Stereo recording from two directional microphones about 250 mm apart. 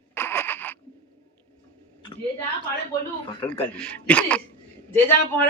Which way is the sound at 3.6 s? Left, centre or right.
Centre.